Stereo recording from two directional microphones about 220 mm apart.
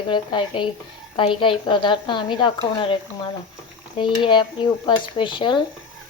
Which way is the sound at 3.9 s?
20° left (ahead or behind).